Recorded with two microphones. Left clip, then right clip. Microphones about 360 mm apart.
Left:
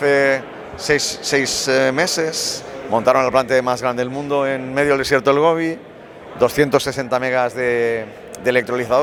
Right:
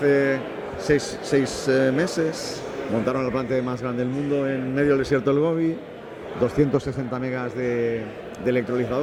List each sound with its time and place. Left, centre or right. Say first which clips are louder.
0.0 s a man's voice: left 5 dB; left
3.1 s a man's voice: left 12 dB; left
6.4 s a man's voice: left 7 dB; left